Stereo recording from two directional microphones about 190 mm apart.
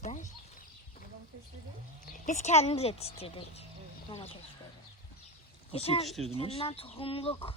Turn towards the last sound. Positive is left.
turn(degrees=30)  # may be behind; listen again after turning